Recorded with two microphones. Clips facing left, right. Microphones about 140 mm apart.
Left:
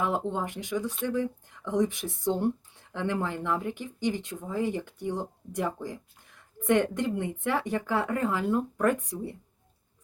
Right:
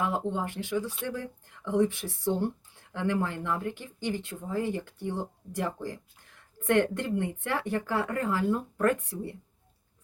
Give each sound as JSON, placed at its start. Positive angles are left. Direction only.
{"t": 0.0, "sound": "speech", "side_deg": 15}